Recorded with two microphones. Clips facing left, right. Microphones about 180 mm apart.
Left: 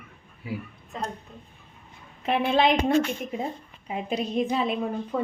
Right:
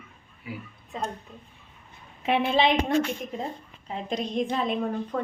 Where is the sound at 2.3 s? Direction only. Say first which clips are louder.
Left 1 dB; centre (ahead or behind).